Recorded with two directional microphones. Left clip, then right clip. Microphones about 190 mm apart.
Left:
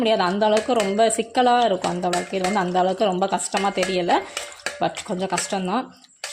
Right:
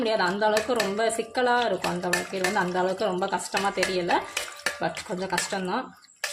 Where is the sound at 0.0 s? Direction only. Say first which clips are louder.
Left 4 dB; 30° left (ahead or behind).